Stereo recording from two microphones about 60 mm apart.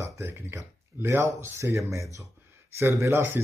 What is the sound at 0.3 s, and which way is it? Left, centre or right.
Speech, right.